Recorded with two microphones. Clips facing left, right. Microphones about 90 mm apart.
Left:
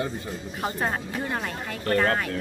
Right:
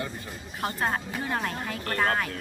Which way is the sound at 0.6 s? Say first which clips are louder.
Even; centre (ahead or behind).